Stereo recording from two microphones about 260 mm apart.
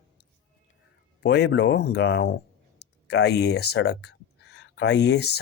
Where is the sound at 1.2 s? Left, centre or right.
Left.